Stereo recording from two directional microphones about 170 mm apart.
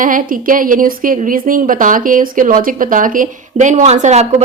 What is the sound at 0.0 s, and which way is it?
A woman's voice, 55° right (ahead or behind).